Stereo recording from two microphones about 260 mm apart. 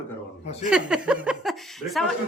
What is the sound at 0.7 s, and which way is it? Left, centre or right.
A woman's voice, centre.